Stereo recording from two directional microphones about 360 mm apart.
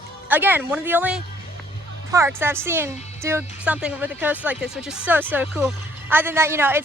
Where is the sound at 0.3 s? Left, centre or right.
Centre.